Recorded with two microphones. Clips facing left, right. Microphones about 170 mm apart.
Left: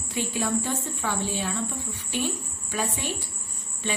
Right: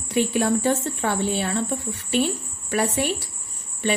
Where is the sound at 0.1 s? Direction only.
70° right (ahead or behind).